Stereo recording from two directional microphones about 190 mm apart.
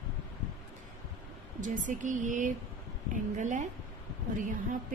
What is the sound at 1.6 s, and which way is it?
A woman's voice, 40° right (ahead or behind).